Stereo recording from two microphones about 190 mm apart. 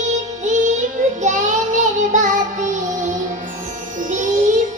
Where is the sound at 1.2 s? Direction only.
40° right (ahead or behind).